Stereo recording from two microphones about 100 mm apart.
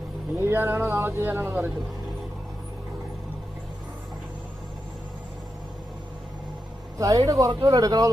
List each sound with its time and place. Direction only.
0.3 s speech: 20° right (ahead or behind)
7.0 s speech: 35° right (ahead or behind)